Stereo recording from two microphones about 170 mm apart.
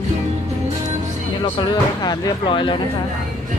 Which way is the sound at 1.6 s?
25° left (ahead or behind).